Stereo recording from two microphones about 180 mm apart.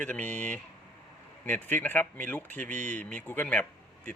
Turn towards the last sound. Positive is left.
turn(degrees=10)  # may be behind; listen again after turning